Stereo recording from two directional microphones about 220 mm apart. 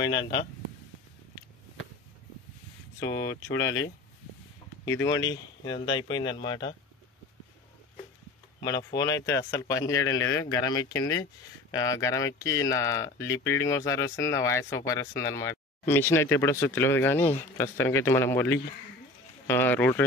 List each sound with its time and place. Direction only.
0.0 s speech: 20° left (ahead or behind)
3.0 s speech: 15° left (ahead or behind)
3.5 s speech: 65° left (ahead or behind)
4.8 s speech: 15° left (ahead or behind)
8.5 s speech: 20° left (ahead or behind)